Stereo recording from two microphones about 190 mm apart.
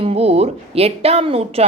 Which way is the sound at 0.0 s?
30° right (ahead or behind).